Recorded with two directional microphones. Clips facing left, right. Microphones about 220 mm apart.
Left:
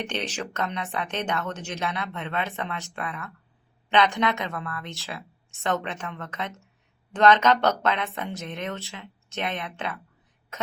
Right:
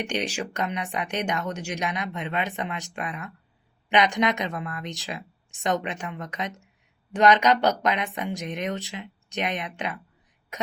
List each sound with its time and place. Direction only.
0.0 s speech: 10° right (ahead or behind)